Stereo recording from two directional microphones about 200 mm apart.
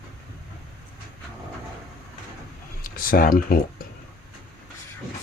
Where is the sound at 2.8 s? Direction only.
45° left (ahead or behind).